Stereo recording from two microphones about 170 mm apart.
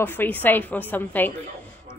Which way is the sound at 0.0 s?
10° left (ahead or behind).